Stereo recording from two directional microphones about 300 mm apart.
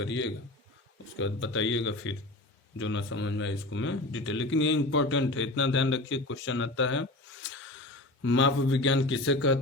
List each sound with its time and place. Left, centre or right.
0.0 s speech: left
8.2 s speech: left